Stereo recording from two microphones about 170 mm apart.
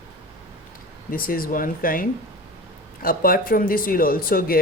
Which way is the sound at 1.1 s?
60° left (ahead or behind).